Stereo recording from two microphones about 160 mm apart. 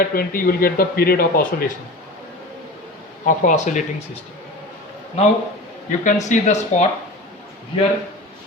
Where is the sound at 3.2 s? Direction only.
50° left (ahead or behind).